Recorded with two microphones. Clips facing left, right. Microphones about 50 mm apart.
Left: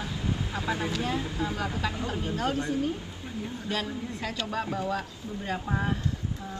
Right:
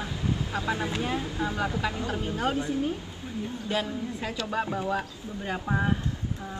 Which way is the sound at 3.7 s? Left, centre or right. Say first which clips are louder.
Right 3 dB; centre.